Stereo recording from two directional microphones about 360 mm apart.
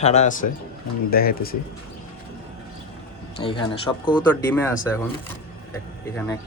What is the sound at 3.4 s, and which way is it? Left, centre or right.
Speech, centre.